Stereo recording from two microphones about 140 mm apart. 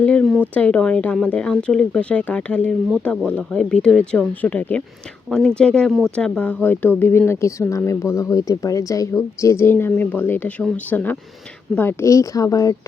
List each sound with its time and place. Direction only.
0.0 s speech: 5° left (ahead or behind); by 12.7 s 25° left (ahead or behind)